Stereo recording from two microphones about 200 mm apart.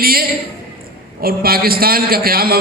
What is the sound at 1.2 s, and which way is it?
A man's voice, 50° right (ahead or behind).